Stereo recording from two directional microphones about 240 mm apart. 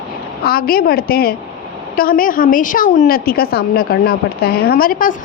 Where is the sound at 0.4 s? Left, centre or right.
Left.